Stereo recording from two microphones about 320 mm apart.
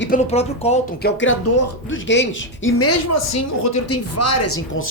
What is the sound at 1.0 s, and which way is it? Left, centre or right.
Speech, left.